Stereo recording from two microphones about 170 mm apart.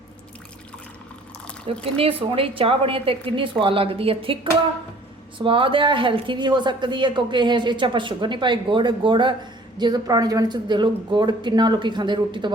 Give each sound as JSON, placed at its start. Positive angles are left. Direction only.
{"t": 2.0, "sound": "a woman's voice", "side_deg": -35}
{"t": 5.4, "sound": "speech", "side_deg": -30}